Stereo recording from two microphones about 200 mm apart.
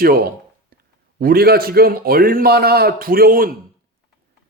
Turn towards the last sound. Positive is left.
turn(degrees=-45)  # may be behind; listen again after turning